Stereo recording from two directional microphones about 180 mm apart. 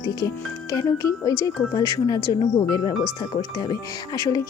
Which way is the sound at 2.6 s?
25° left (ahead or behind).